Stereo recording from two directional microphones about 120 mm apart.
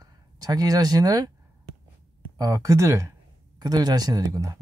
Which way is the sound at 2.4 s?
25° right (ahead or behind).